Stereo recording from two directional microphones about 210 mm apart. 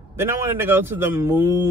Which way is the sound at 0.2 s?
10° right (ahead or behind).